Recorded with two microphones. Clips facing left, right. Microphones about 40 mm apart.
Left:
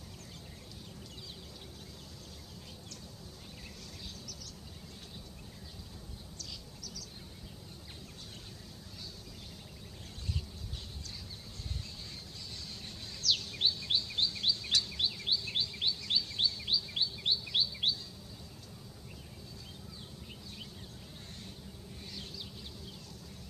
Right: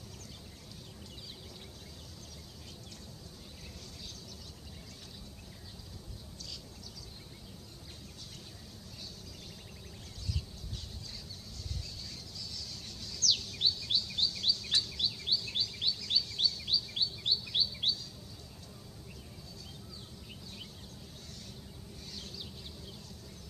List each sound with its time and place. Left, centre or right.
12.4 s a sound: left
13.2 s chirp: centre
14.8 s bird vocalization: centre
15.5 s chirp: left